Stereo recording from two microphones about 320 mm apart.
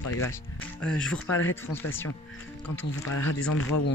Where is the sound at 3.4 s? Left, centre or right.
Left.